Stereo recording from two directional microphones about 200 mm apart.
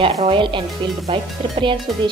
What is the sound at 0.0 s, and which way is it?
Speech, 30° right (ahead or behind).